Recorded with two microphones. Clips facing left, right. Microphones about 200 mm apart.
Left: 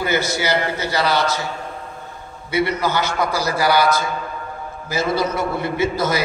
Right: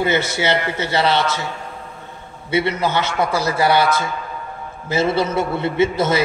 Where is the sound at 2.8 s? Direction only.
25° right (ahead or behind).